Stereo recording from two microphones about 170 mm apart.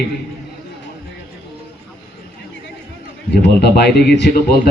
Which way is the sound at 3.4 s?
75° left (ahead or behind).